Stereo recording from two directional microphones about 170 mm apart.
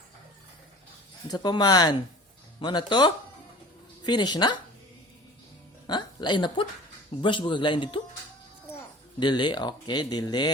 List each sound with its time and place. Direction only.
1.3 s speech: 25° left (ahead or behind)
5.9 s speech: 25° left (ahead or behind)
9.2 s speech: 25° left (ahead or behind)